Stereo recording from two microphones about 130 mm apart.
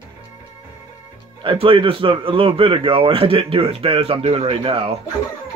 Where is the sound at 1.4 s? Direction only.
40° right (ahead or behind).